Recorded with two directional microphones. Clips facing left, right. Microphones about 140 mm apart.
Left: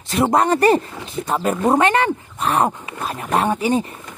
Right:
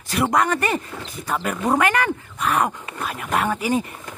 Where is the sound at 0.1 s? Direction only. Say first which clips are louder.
Left 4 dB; 25° left (ahead or behind).